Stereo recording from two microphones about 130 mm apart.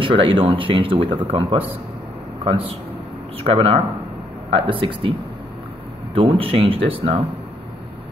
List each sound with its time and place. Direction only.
0.0 s speech: 40° right (ahead or behind)
6.1 s speech: 45° right (ahead or behind)